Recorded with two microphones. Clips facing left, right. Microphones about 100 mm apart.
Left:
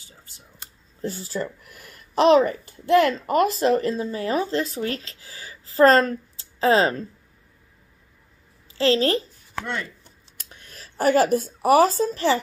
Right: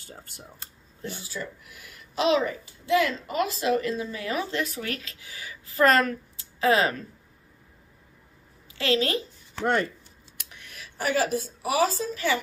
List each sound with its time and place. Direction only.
0.0 s speech: 55° right (ahead or behind)
1.0 s speech: 40° left (ahead or behind)
8.7 s speech: 30° left (ahead or behind)
10.5 s a woman's voice: 35° left (ahead or behind)